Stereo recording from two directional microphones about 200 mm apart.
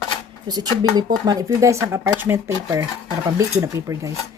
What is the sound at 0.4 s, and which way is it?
Speech, 20° right (ahead or behind).